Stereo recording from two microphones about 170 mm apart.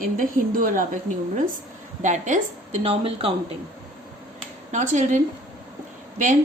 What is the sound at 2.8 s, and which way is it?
Speech, 35° right (ahead or behind).